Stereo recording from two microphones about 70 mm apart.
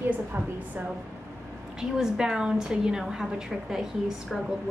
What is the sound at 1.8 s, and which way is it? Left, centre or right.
A woman's voice, centre.